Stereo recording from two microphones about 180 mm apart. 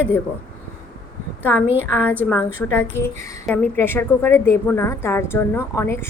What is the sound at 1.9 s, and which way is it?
A woman's voice, 10° left (ahead or behind).